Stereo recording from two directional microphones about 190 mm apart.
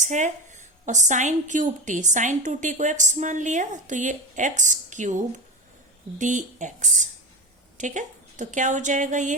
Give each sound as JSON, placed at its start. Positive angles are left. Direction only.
{"t": 0.0, "sound": "a woman's voice", "side_deg": -40}